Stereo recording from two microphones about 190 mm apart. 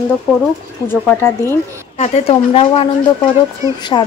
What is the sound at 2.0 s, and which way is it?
Speech, 35° left (ahead or behind).